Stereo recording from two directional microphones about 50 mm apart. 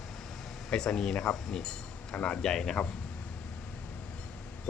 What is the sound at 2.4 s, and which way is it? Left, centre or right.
Speech, centre.